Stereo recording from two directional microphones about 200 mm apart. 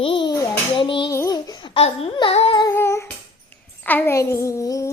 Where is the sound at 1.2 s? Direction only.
15° left (ahead or behind).